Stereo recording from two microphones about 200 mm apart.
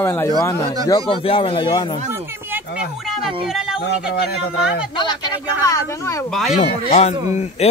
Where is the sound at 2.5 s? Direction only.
5° right (ahead or behind).